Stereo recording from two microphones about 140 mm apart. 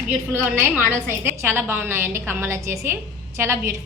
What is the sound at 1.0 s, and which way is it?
A woman's voice, 15° right (ahead or behind).